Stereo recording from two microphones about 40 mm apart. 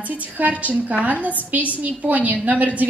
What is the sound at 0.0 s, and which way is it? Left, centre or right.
A woman's voice, right.